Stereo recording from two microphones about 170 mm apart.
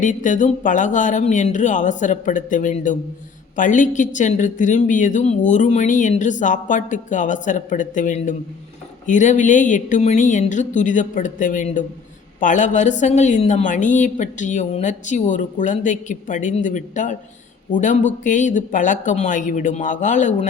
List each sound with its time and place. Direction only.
0.0 s a woman's voice: 45° left (ahead or behind)